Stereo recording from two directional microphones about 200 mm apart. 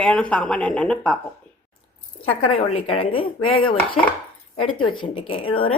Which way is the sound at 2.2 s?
30° left (ahead or behind).